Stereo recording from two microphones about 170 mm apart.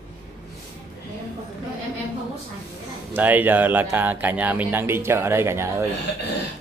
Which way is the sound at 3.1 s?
10° right (ahead or behind).